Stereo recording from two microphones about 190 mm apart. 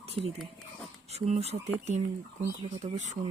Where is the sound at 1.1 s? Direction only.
35° right (ahead or behind).